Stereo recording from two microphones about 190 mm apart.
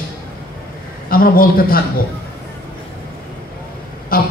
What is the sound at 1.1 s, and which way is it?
Speech, 50° left (ahead or behind).